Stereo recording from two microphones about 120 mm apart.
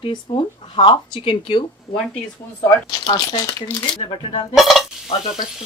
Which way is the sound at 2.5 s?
30° left (ahead or behind).